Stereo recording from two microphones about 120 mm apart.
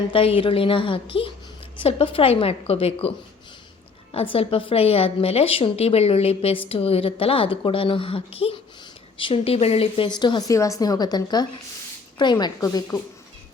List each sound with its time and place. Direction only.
0.1 s a woman's voice: 50° left (ahead or behind)
4.1 s a woman's voice: 50° left (ahead or behind)
10.1 s a woman's voice: 40° left (ahead or behind)
10.5 s a woman's voice: 25° left (ahead or behind)